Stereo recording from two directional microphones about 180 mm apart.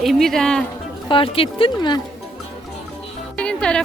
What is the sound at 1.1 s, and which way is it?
Speech, 30° left (ahead or behind).